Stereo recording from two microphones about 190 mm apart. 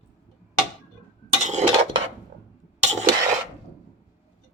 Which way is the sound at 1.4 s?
35° right (ahead or behind).